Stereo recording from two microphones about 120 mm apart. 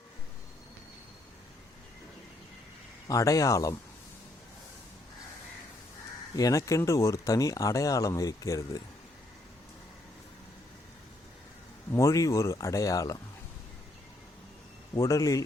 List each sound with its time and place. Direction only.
3.1 s speech: 30° left (ahead or behind)
6.3 s speech: 30° left (ahead or behind)
11.9 s speech: 25° left (ahead or behind)
14.9 s speech: 30° left (ahead or behind)